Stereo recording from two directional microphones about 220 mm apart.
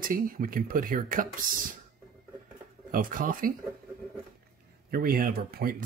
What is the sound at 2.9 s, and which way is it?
Speech, 40° right (ahead or behind).